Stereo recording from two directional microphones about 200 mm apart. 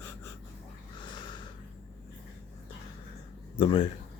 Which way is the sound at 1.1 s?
20° left (ahead or behind).